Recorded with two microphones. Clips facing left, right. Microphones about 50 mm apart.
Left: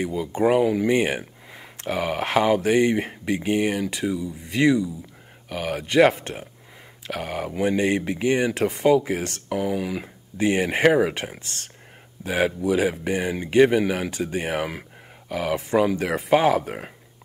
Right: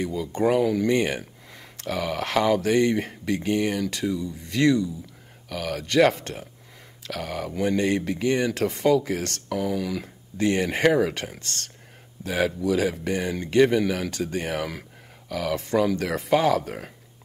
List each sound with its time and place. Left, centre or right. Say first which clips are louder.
0.0 s speech: left 2 dB; centre